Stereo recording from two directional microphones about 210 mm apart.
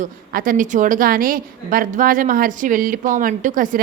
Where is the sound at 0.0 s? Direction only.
40° right (ahead or behind).